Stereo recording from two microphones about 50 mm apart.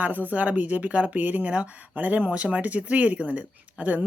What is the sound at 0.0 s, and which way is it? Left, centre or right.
Speech, right.